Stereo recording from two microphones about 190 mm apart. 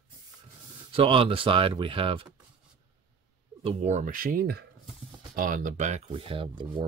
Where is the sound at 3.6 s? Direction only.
35° right (ahead or behind).